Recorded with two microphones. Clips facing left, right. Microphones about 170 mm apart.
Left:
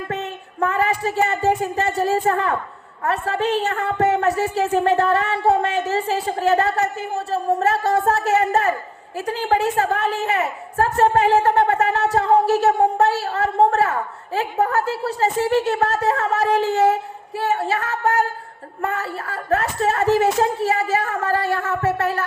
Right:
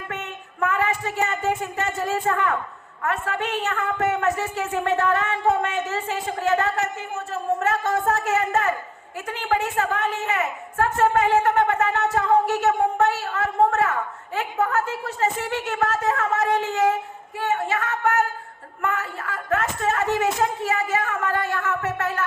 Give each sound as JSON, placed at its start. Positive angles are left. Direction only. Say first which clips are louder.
{"t": 0.1, "sound": "a woman's voice", "louder": "left 6 dB", "side_deg": 35}